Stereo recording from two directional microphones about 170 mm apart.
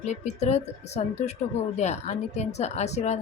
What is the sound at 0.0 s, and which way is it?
Speech, 40° left (ahead or behind).